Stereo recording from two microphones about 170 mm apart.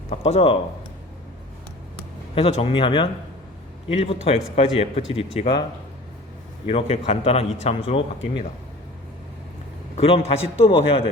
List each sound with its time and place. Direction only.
0.3 s a man's voice: 35° left (ahead or behind)
2.3 s a man's voice: 35° left (ahead or behind)
6.7 s a man's voice: 35° left (ahead or behind)
10.0 s a man's voice: 35° left (ahead or behind)